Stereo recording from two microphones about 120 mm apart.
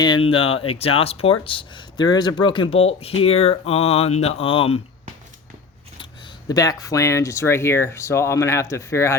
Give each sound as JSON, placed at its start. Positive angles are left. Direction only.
{"t": 0.0, "sound": "speech", "side_deg": 45}
{"t": 6.5, "sound": "speech", "side_deg": 30}